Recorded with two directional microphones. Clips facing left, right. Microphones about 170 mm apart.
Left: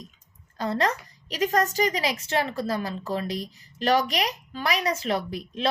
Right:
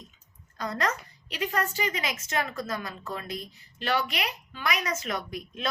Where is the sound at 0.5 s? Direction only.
30° left (ahead or behind).